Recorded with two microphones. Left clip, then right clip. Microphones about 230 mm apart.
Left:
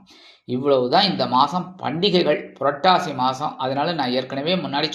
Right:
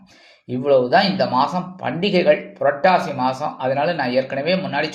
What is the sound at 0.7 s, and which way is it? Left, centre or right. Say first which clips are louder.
Speech: right 2 dB; left.